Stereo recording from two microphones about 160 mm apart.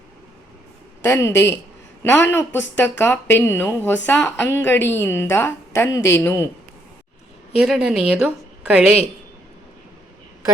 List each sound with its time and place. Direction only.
1.0 s speech: 15° left (ahead or behind)
7.5 s a woman's voice: 5° right (ahead or behind)